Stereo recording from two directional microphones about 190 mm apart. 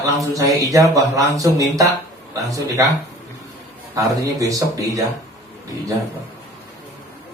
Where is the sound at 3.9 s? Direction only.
15° right (ahead or behind).